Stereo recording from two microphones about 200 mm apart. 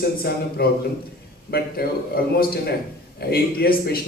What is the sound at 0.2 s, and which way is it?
A man's voice, 50° left (ahead or behind).